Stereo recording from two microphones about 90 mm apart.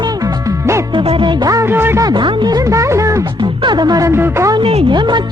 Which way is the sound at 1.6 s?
25° right (ahead or behind).